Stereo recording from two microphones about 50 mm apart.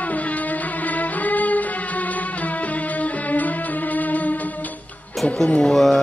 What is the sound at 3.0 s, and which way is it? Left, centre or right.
Music, left.